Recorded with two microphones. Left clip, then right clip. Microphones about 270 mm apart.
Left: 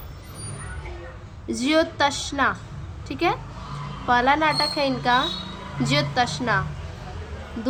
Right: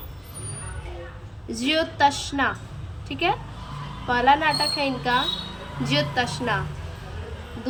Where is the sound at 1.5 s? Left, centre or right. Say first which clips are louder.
Left 3 dB; centre.